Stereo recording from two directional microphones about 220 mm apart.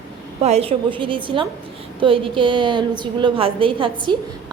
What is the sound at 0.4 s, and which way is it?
A woman's voice, 30° right (ahead or behind).